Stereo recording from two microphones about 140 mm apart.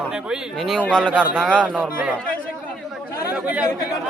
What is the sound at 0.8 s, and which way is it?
Speech, 10° left (ahead or behind).